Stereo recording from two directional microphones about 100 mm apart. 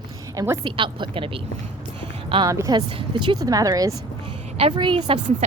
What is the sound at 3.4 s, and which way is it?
Speech, 35° right (ahead or behind).